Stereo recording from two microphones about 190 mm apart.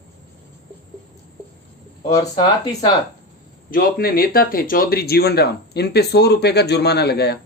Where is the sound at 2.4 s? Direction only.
20° left (ahead or behind).